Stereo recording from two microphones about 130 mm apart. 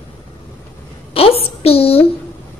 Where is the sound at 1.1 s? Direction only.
50° left (ahead or behind).